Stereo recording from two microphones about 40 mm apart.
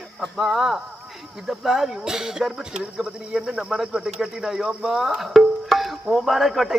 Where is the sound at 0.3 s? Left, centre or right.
Centre.